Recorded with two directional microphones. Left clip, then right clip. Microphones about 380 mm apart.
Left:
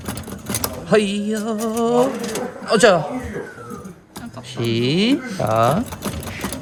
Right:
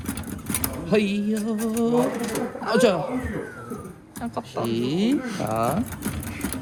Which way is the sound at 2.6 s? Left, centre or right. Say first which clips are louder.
Left 6 dB; left.